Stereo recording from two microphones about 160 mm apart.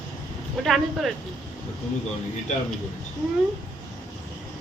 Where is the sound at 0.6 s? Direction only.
Centre (ahead or behind).